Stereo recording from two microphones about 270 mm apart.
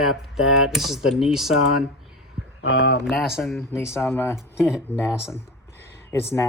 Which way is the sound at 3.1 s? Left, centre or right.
Centre.